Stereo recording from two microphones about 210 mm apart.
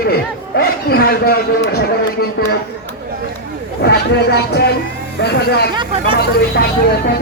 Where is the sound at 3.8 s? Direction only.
50° left (ahead or behind).